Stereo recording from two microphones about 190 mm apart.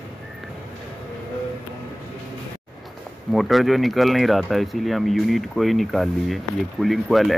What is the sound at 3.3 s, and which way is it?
Speech, centre (ahead or behind).